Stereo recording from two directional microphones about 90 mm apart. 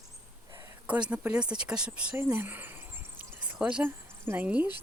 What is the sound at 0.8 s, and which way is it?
Speech, 15° right (ahead or behind).